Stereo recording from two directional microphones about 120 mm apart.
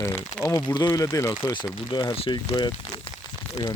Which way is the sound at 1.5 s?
40° left (ahead or behind).